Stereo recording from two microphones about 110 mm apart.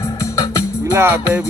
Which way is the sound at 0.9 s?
20° right (ahead or behind).